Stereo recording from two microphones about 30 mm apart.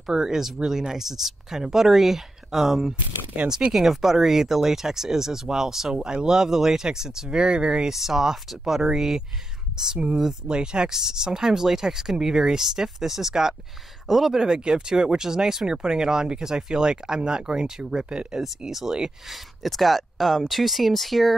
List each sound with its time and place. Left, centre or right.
0.0 s speech: centre
7.9 s speech: centre
10.0 s speech: right; by 14.3 s centre
14.3 s speech: right
18.7 s speech: centre
19.2 s speech: centre